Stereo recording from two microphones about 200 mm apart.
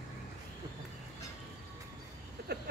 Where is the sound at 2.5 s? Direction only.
55° right (ahead or behind).